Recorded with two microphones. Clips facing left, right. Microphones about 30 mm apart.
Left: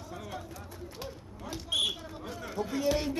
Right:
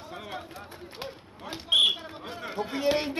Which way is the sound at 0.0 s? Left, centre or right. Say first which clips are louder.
Right 3 dB; right.